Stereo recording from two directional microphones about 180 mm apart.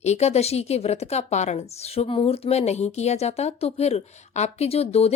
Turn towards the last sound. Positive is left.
turn(degrees=35)  # may be behind; listen again after turning